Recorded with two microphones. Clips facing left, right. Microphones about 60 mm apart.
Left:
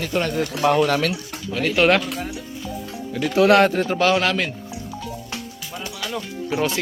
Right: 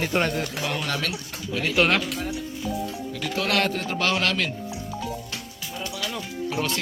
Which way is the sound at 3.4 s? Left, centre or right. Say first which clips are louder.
Left 10 dB; left.